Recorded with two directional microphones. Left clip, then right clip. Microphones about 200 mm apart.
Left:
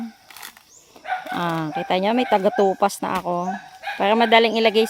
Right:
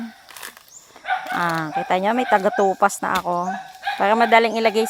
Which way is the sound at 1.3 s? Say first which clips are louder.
Right 1 dB; 20° left (ahead or behind).